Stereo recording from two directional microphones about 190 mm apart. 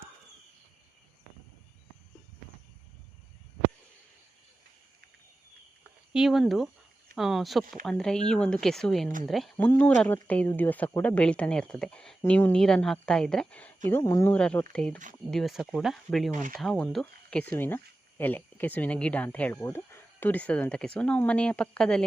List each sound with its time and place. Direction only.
6.1 s speech: centre (ahead or behind); by 14.3 s 15° left (ahead or behind)
14.3 s speech: 5° left (ahead or behind)
16.3 s speech: 45° right (ahead or behind)
16.6 s speech: 5° left (ahead or behind)